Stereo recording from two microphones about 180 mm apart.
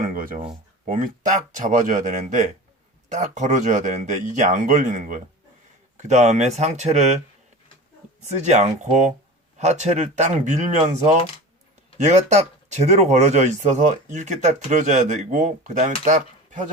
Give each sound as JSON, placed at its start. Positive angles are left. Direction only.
{"t": 0.1, "sound": "a sound", "side_deg": -50}
{"t": 0.9, "sound": "speech", "side_deg": -45}
{"t": 8.2, "sound": "speech", "side_deg": -40}